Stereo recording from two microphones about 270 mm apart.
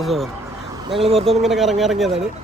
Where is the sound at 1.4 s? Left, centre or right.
Centre.